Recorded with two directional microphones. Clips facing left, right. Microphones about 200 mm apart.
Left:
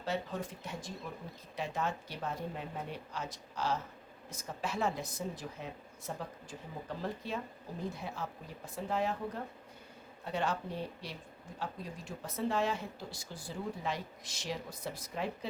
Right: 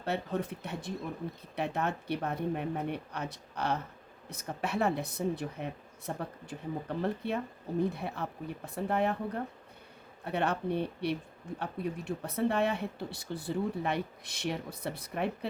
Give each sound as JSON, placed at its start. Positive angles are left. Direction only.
{"t": 0.0, "sound": "speech", "side_deg": -60}